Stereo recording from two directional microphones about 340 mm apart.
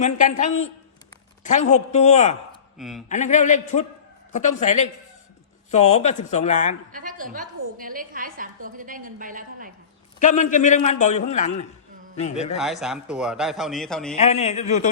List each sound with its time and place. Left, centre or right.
0.0 s a man's voice: left
1.7 s a man's voice: centre
2.7 s speech: centre
3.1 s a man's voice: left
6.9 s a woman's voice: right
10.2 s a man's voice: left
12.5 s a man's voice: centre
14.2 s a man's voice: centre